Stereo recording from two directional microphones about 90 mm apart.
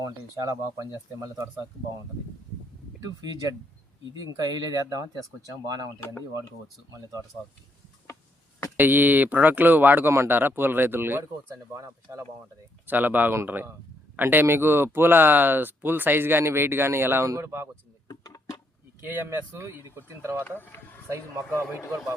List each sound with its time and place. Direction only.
0.0 s speech: 45° right (ahead or behind)
4.2 s speech: 50° right (ahead or behind)
8.7 s speech: 20° right (ahead or behind)
11.5 s speech: 35° right (ahead or behind)
12.9 s speech: 20° right (ahead or behind)
18.1 s a sound: 40° left (ahead or behind)
19.0 s speech: 25° right (ahead or behind)
20.4 s speech: 25° left (ahead or behind)
21.1 s speech: 30° right (ahead or behind)